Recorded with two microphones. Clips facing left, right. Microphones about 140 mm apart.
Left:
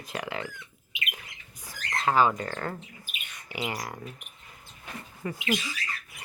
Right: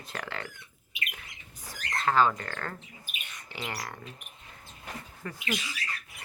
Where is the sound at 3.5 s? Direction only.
10° left (ahead or behind).